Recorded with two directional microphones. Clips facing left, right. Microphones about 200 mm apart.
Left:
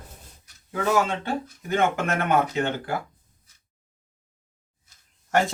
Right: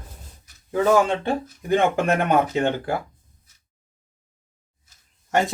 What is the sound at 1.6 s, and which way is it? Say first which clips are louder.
Speech: right 3 dB; 30° right (ahead or behind).